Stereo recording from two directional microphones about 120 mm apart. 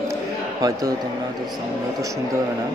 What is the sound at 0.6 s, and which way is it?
Speech, 30° right (ahead or behind).